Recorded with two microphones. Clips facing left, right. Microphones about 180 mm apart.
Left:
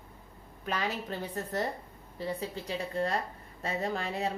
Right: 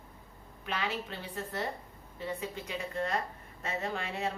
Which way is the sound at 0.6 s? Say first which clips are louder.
Left 2 dB; 40° left (ahead or behind).